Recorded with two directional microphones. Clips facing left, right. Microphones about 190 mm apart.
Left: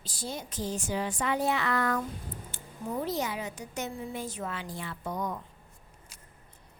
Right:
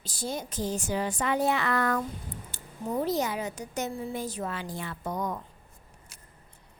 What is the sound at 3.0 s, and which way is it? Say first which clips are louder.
A woman's voice: right 4 dB; 40° right (ahead or behind).